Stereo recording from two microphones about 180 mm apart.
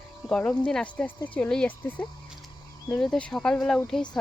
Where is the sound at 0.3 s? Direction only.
5° left (ahead or behind).